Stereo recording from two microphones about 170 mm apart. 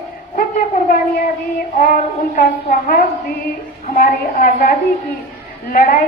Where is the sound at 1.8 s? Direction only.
55° left (ahead or behind).